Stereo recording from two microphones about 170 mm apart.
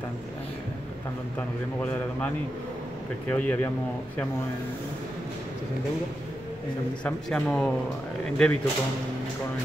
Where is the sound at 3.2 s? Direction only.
10° left (ahead or behind).